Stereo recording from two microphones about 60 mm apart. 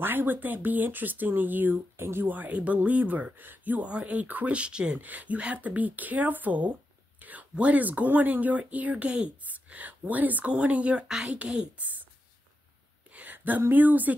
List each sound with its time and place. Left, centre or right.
0.0 s speech: right
2.0 s speech: right
2.2 s speech: right
4.9 s speech: right
13.1 s speech: right